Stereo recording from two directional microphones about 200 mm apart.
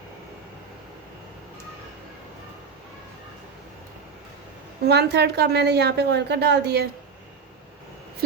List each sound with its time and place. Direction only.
4.9 s a woman's voice: 55° right (ahead or behind)